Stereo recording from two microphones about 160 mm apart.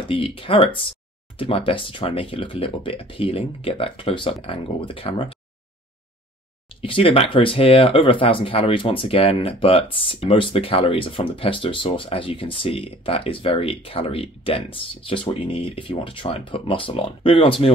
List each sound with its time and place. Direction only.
0.1 s speech: 35° left (ahead or behind)
6.8 s speech: 35° left (ahead or behind)